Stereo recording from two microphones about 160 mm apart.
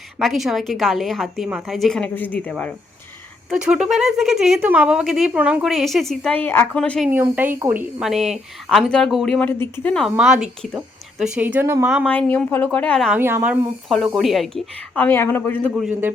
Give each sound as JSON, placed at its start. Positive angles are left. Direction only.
{"t": 0.2, "sound": "speech", "side_deg": 0}
{"t": 3.5, "sound": "speech", "side_deg": -5}
{"t": 7.1, "sound": "speech", "side_deg": -10}
{"t": 9.5, "sound": "speech", "side_deg": 15}
{"t": 9.9, "sound": "speech", "side_deg": 0}
{"t": 12.0, "sound": "speech", "side_deg": 10}
{"t": 13.1, "sound": "speech", "side_deg": -15}
{"t": 13.8, "sound": "speech", "side_deg": 0}
{"t": 15.7, "sound": "speech", "side_deg": -10}